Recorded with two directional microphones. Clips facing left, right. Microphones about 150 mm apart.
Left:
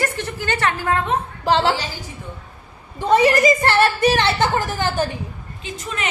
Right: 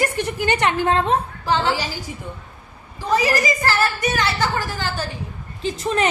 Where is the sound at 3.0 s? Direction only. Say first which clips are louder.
Left 5 dB; 25° left (ahead or behind).